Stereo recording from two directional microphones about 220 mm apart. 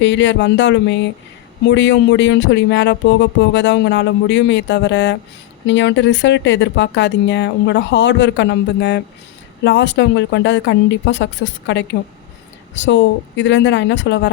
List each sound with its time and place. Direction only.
0.0 s music: 55° left (ahead or behind)
1.6 s speech: 55° left (ahead or behind)